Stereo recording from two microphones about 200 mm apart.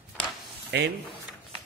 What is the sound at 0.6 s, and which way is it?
Speech, 55° right (ahead or behind).